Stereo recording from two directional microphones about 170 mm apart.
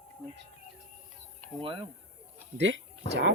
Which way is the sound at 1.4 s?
10° left (ahead or behind).